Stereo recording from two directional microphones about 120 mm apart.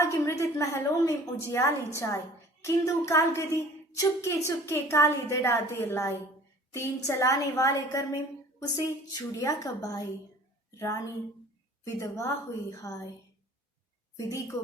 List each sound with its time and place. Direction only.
0.0 s a woman's voice: 25° left (ahead or behind)
14.2 s a woman's voice: 30° left (ahead or behind)